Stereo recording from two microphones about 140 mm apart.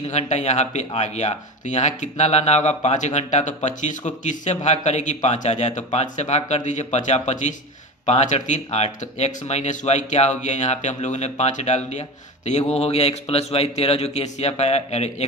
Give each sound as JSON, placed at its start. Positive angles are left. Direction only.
{"t": 0.1, "sound": "speech", "side_deg": 55}